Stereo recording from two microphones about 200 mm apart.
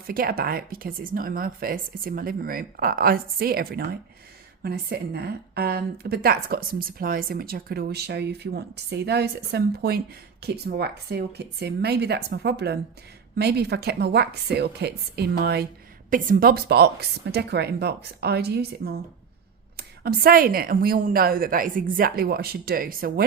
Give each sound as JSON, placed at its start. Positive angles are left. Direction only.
{"t": 0.1, "sound": "a woman's voice", "side_deg": -50}